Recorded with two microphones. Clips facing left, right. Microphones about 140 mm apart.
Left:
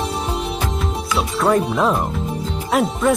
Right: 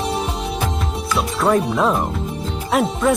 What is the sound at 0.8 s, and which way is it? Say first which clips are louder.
Speech: even; centre (ahead or behind).